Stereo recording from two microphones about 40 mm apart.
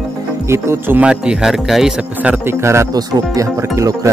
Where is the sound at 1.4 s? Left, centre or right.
Centre.